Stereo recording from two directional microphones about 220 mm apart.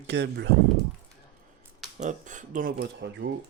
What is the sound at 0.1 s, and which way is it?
Speech, 50° right (ahead or behind).